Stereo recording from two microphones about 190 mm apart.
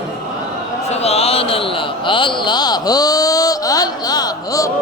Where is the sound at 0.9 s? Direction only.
35° left (ahead or behind).